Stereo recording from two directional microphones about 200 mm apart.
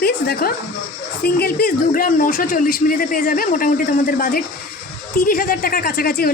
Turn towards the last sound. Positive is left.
turn(degrees=50)  # may be behind; listen again after turning